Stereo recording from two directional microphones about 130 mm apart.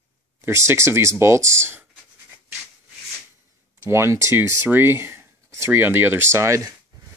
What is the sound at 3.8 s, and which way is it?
Speech, 20° right (ahead or behind).